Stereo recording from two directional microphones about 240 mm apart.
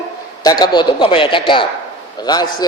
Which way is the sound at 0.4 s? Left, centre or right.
Centre.